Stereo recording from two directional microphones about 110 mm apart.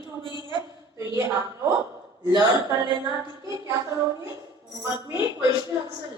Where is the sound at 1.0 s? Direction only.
25° right (ahead or behind).